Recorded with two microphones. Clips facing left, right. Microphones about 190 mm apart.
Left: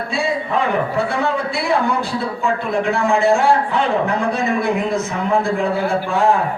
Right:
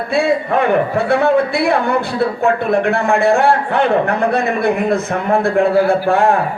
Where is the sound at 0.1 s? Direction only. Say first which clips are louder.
Right 6 dB; 60° right (ahead or behind).